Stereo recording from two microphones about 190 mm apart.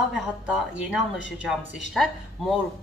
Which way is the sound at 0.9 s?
5° right (ahead or behind).